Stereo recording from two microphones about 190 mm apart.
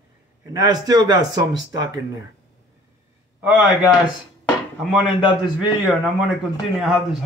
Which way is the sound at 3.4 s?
Centre (ahead or behind).